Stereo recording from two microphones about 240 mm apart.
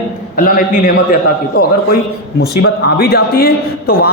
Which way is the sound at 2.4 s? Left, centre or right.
Left.